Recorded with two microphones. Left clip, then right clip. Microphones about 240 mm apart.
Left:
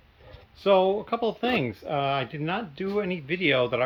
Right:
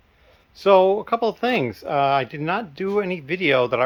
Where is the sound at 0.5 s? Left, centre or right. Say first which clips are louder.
Right 6 dB; centre.